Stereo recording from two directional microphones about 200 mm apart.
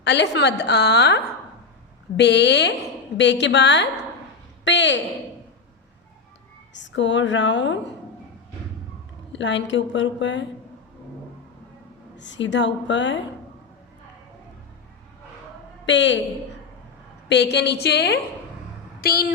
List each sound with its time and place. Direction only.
0.0 s a woman's voice: 60° left (ahead or behind)
6.7 s a woman's voice: 65° left (ahead or behind)
9.3 s a woman's voice: 65° left (ahead or behind)
12.1 s a woman's voice: 65° left (ahead or behind)
15.9 s a woman's voice: 65° left (ahead or behind)
17.2 s a woman's voice: 60° left (ahead or behind)